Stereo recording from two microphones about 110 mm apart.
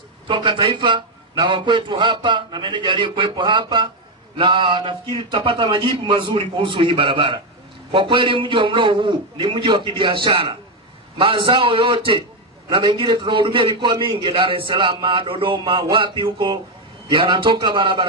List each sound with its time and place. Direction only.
0.3 s a man's voice: 50° right (ahead or behind)